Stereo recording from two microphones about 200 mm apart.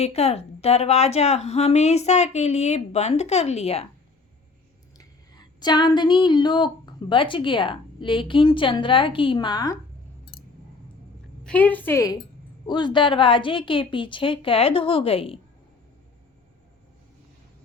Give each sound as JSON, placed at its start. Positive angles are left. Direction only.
{"t": 0.0, "sound": "a woman's voice", "side_deg": 30}
{"t": 4.9, "sound": "speech", "side_deg": 20}
{"t": 11.4, "sound": "a woman's voice", "side_deg": 10}